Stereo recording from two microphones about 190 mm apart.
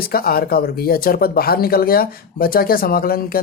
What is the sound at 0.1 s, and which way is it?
Speech, 55° left (ahead or behind).